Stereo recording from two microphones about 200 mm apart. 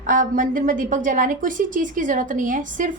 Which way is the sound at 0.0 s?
40° right (ahead or behind).